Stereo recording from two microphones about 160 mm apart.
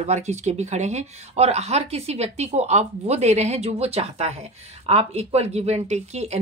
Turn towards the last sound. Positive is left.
turn(degrees=-40)  # may be behind; listen again after turning